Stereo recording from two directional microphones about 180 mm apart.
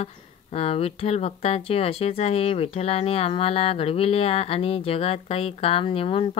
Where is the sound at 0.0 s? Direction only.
35° left (ahead or behind).